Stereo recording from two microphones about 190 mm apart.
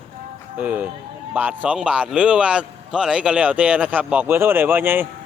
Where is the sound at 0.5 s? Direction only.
10° right (ahead or behind).